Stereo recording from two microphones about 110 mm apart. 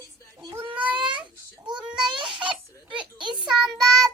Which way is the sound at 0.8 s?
15° right (ahead or behind).